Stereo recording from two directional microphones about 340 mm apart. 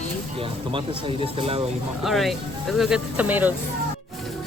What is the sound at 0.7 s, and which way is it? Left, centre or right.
Speech, centre.